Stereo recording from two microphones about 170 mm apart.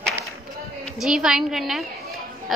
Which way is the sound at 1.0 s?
5° right (ahead or behind).